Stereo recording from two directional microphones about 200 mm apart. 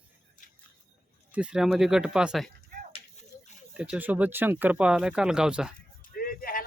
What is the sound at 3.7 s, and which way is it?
Speech, 5° right (ahead or behind).